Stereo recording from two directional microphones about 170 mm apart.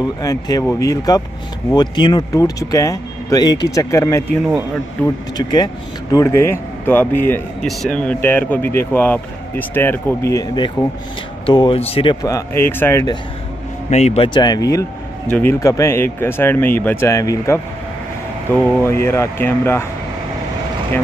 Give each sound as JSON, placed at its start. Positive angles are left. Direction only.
{"t": 0.2, "sound": "speech", "side_deg": 20}
{"t": 5.4, "sound": "speech", "side_deg": 25}
{"t": 13.8, "sound": "speech", "side_deg": 40}
{"t": 15.2, "sound": "speech", "side_deg": 5}
{"t": 15.6, "sound": "speech", "side_deg": 20}
{"t": 18.9, "sound": "speech", "side_deg": 15}